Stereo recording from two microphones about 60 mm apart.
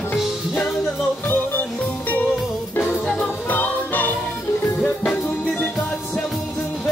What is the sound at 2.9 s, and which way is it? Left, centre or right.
Music, left.